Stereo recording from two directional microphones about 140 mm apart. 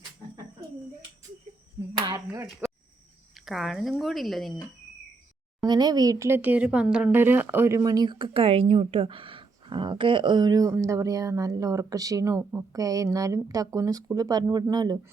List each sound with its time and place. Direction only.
1.9 s a sound: 35° right (ahead or behind)
2.3 s speech: 20° right (ahead or behind)
3.4 s speech: centre (ahead or behind)
5.6 s speech: 30° right (ahead or behind)